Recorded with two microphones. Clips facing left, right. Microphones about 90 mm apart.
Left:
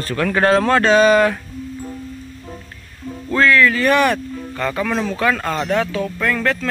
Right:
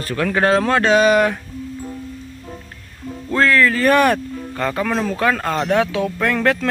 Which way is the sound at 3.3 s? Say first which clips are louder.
Left 1 dB; 40° right (ahead or behind).